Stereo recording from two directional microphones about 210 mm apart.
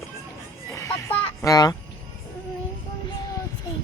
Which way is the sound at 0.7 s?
10° left (ahead or behind).